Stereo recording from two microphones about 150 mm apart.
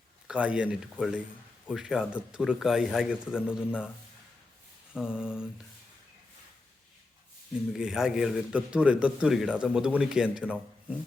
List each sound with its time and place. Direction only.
0.3 s a man's voice: 10° right (ahead or behind)
4.9 s a man's voice: 5° right (ahead or behind)
7.7 s a man's voice: 5° right (ahead or behind)